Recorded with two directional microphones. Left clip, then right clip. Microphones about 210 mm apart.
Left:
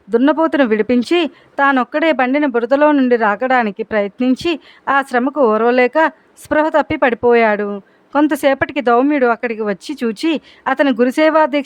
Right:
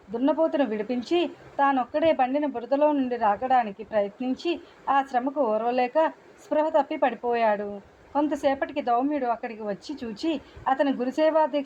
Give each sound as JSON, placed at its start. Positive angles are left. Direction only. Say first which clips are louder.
{"t": 0.1, "sound": "speech", "louder": "left 10 dB", "side_deg": 45}